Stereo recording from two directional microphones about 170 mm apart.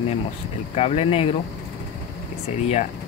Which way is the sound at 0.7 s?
35° left (ahead or behind).